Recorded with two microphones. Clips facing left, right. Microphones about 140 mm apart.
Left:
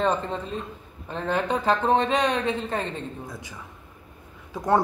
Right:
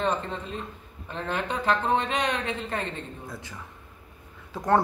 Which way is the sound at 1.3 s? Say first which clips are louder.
Left 3 dB; 35° left (ahead or behind).